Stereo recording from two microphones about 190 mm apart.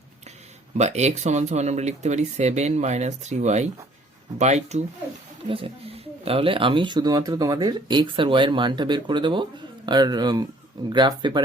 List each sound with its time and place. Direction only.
0.8 s speech: 35° right (ahead or behind)